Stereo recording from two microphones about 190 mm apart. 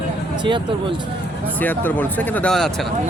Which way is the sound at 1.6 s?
10° left (ahead or behind).